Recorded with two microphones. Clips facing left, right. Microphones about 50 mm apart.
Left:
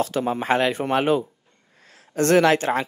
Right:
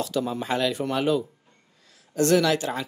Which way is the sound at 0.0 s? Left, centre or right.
Left.